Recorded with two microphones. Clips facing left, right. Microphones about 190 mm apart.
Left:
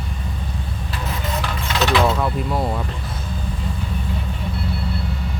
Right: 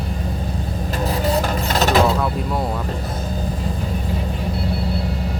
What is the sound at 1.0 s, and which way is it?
Vehicle, 35° right (ahead or behind).